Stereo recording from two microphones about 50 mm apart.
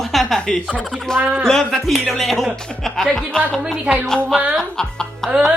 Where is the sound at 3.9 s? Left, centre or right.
Right.